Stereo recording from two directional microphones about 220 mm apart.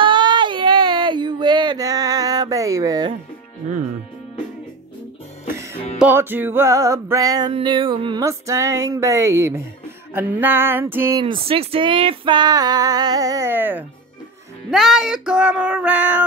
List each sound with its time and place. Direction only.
0.0 s a sound: 20° right (ahead or behind)
5.5 s music: 10° right (ahead or behind)
5.9 s female singing: 10° right (ahead or behind)
14.7 s music: centre (ahead or behind)